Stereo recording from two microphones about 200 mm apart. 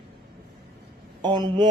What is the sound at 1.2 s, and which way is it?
Speech, 20° right (ahead or behind).